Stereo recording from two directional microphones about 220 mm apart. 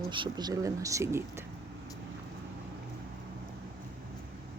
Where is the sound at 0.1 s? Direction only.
20° right (ahead or behind).